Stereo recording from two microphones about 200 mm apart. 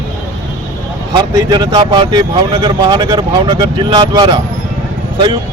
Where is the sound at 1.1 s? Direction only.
20° right (ahead or behind).